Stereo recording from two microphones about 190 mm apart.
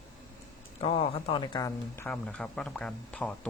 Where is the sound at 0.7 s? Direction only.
30° left (ahead or behind).